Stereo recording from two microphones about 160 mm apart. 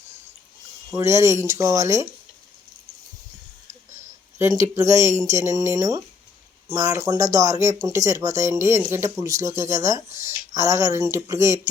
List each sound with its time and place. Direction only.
0.9 s speech: 15° right (ahead or behind)
4.4 s speech: 15° right (ahead or behind)